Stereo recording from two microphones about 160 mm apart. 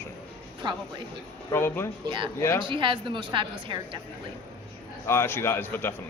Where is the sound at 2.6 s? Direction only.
30° right (ahead or behind).